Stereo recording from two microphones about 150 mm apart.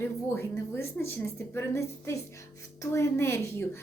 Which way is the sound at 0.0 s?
15° left (ahead or behind).